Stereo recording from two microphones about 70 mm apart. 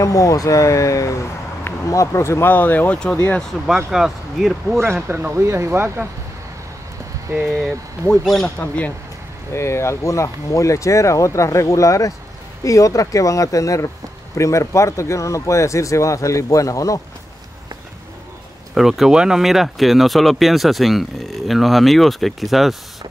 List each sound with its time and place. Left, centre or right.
0.0 s speech: left
2.5 s speech: left
3.6 s speech: centre
4.7 s speech: right
7.5 s speech: centre
8.5 s speech: left
9.5 s speech: left
18.8 s speech: centre